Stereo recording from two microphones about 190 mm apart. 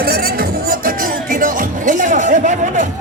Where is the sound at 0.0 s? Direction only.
55° right (ahead or behind).